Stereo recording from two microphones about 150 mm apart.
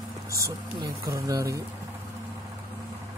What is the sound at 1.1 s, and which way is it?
Speech, 25° right (ahead or behind).